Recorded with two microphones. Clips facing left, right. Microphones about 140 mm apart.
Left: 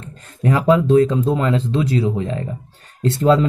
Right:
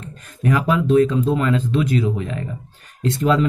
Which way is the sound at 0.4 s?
30° left (ahead or behind).